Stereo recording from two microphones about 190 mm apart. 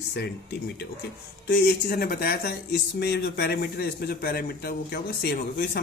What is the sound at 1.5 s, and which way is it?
Speech, 55° left (ahead or behind).